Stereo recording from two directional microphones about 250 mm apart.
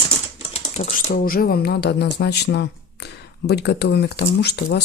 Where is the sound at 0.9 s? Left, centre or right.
Left.